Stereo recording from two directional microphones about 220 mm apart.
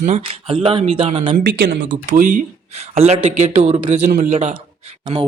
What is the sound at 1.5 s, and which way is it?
Speech, 55° right (ahead or behind).